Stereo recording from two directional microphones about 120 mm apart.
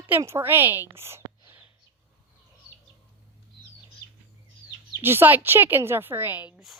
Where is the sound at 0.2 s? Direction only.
20° right (ahead or behind).